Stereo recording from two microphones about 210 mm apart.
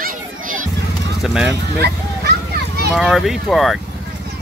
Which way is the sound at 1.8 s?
50° right (ahead or behind).